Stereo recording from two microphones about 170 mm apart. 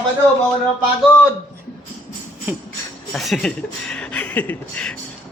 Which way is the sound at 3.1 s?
Centre (ahead or behind).